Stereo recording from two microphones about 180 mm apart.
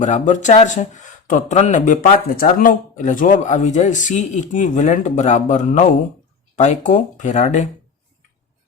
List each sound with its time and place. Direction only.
0.0 s speech: 40° left (ahead or behind)